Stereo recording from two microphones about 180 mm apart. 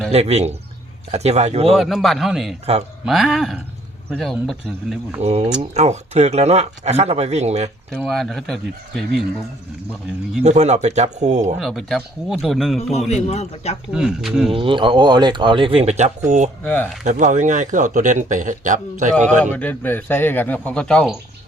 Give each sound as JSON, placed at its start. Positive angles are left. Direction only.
{"t": 0.1, "sound": "speech", "side_deg": -35}
{"t": 1.7, "sound": "speech", "side_deg": 0}
{"t": 5.2, "sound": "speech", "side_deg": -35}
{"t": 7.9, "sound": "speech", "side_deg": 5}
{"t": 10.4, "sound": "speech", "side_deg": -40}
{"t": 11.6, "sound": "speech", "side_deg": 0}
{"t": 13.1, "sound": "a man's voice", "side_deg": 40}
{"t": 13.9, "sound": "speech", "side_deg": 0}
{"t": 14.5, "sound": "speech", "side_deg": -30}
{"t": 16.6, "sound": "speech", "side_deg": 10}
{"t": 17.0, "sound": "speech", "side_deg": -45}
{"t": 19.5, "sound": "speech", "side_deg": 10}